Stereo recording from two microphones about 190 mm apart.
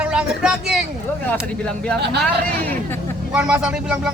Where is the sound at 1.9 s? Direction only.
60° right (ahead or behind).